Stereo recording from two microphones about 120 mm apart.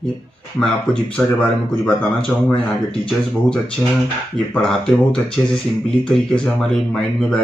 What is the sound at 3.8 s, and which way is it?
Speech, 20° left (ahead or behind).